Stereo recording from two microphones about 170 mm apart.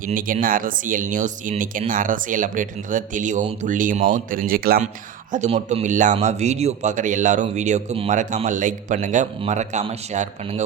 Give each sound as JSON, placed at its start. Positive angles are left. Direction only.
{"t": 0.0, "sound": "speech", "side_deg": -55}
{"t": 5.3, "sound": "speech", "side_deg": -45}